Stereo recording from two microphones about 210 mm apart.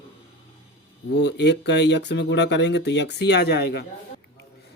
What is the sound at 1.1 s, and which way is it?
Speech, 55° left (ahead or behind).